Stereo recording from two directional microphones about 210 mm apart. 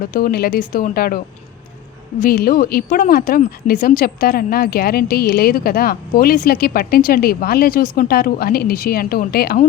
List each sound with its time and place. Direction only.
0.0 s speech: 45° left (ahead or behind)
2.2 s speech: 45° left (ahead or behind)